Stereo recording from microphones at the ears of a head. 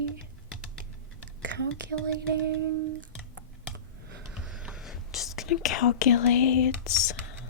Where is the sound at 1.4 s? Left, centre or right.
Right.